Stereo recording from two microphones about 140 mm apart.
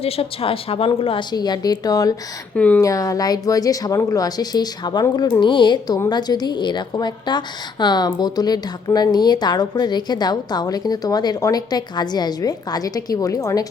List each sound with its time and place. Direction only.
0.0 s a woman's voice: 40° left (ahead or behind); by 2.1 s 25° left (ahead or behind)
2.6 s speech: 10° left (ahead or behind)
2.8 s a woman's voice: 25° left (ahead or behind)